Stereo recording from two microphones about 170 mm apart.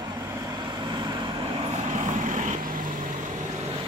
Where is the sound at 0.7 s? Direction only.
25° right (ahead or behind).